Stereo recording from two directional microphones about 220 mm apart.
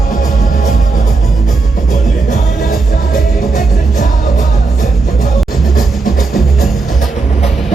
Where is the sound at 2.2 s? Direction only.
35° left (ahead or behind).